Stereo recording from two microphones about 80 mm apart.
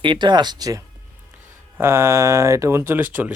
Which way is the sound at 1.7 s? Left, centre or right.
Right.